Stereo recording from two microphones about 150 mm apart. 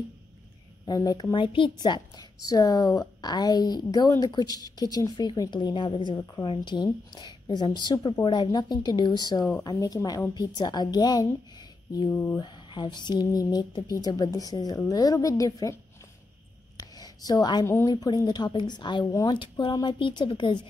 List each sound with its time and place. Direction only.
0.8 s a woman's voice: 25° left (ahead or behind)
12.4 s a woman's voice: 30° left (ahead or behind)
16.9 s a woman's voice: 25° left (ahead or behind)